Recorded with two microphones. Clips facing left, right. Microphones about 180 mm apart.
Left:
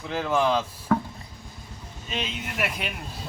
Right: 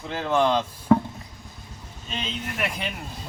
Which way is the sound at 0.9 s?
20° right (ahead or behind).